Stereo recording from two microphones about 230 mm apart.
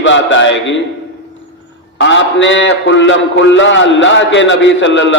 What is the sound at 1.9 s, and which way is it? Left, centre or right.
A man's voice, left.